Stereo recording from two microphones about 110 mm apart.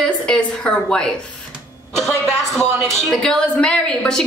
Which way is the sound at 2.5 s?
5° left (ahead or behind).